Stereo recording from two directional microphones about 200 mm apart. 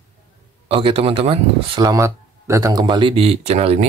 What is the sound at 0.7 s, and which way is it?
Speech, 25° right (ahead or behind).